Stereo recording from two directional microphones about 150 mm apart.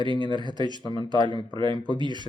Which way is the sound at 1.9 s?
30° right (ahead or behind).